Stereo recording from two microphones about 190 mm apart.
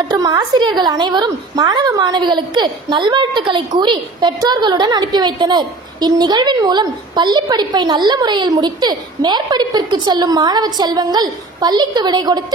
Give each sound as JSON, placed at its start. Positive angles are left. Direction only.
{"t": 0.1, "sound": "a woman's voice", "side_deg": -20}